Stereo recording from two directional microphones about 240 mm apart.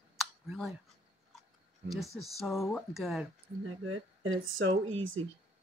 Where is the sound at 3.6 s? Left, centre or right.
Right.